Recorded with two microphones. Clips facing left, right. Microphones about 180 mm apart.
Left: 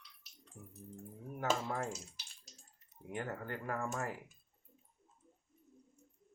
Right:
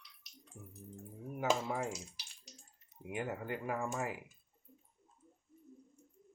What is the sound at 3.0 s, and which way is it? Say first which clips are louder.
Speech: right 2 dB; 15° right (ahead or behind).